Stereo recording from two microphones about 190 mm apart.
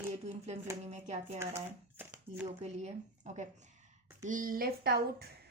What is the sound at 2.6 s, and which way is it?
A woman's voice, 35° right (ahead or behind).